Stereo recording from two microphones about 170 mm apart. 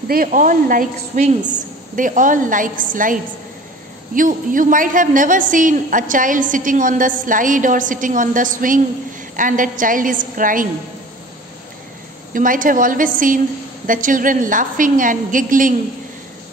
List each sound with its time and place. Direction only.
0.1 s a woman's voice: 55° right (ahead or behind)
12.4 s a woman's voice: 50° right (ahead or behind)